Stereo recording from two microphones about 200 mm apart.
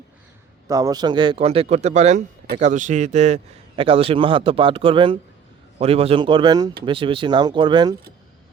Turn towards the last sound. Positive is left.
turn(degrees=-20)  # may be behind; listen again after turning